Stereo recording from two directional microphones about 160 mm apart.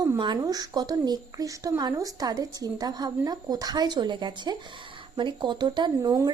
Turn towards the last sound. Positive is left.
turn(degrees=-20)  # may be behind; listen again after turning